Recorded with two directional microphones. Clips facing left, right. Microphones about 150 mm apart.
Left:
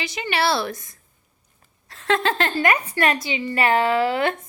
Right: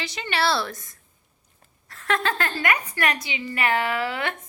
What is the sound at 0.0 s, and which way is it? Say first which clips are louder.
Speech: left 2 dB; 15° left (ahead or behind).